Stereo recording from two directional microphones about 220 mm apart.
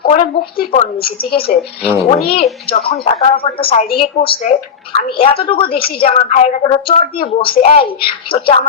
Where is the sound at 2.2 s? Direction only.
45° left (ahead or behind).